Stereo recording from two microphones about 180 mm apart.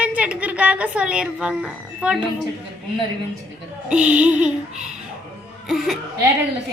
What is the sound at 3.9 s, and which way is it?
Speech, 5° right (ahead or behind).